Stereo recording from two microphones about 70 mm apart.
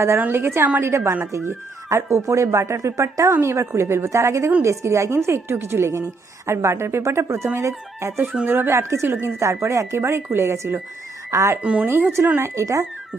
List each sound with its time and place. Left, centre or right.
0.2 s a woman's voice: right
11.6 s speech: centre
11.9 s speech: right
12.4 s a woman's voice: right